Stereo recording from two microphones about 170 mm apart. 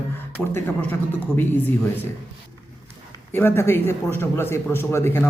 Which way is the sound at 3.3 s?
15° left (ahead or behind).